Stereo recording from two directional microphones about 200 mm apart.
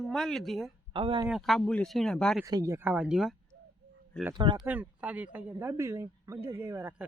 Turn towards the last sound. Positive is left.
turn(degrees=-10)  # may be behind; listen again after turning